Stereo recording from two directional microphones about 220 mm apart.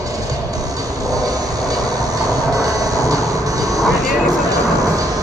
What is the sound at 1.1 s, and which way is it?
Train, 15° right (ahead or behind).